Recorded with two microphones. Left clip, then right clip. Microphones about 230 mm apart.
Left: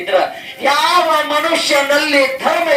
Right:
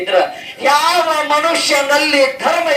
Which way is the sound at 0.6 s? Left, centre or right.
Right.